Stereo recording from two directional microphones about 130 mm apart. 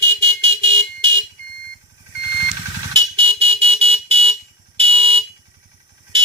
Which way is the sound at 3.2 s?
45° right (ahead or behind).